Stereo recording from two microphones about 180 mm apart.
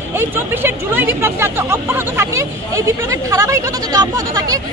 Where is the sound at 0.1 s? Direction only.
10° right (ahead or behind).